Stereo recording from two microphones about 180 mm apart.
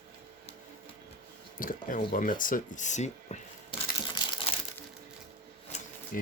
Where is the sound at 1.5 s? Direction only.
50° left (ahead or behind).